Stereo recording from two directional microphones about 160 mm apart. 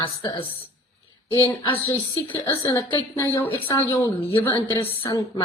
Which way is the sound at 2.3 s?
15° left (ahead or behind).